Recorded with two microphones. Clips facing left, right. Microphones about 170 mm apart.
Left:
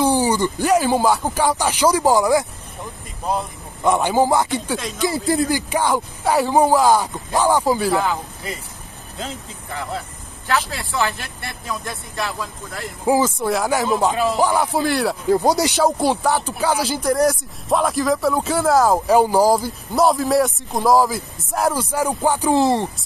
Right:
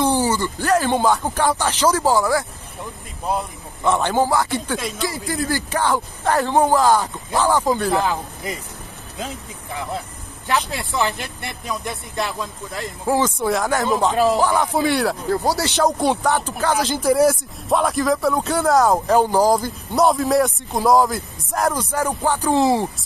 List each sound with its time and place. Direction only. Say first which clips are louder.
0.0 s speech: left 2 dB; 10° left (ahead or behind)
3.8 s speech: left 2 dB; 15° left (ahead or behind)
5.1 s speech: left 6 dB; 30° left (ahead or behind)
5.5 s speech: left 1 dB; 10° left (ahead or behind)
10.7 s speech: even; 20° right (ahead or behind)
13.0 s speech: left 2 dB; 5° left (ahead or behind)
14.3 s speech: even; 15° left (ahead or behind)
14.8 s speech: right 1 dB; centre (ahead or behind)
15.2 s speech: left 4 dB; 15° left (ahead or behind)
15.8 s speech: right 3 dB; 5° left (ahead or behind)
17.0 s speech: right 3 dB; 5° right (ahead or behind)
21.9 s speech: left 1 dB; 15° left (ahead or behind)
22.5 s speech: even; centre (ahead or behind)